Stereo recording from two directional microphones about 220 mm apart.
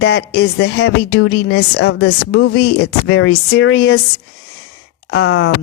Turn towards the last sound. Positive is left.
turn(degrees=70)  # may be behind; listen again after turning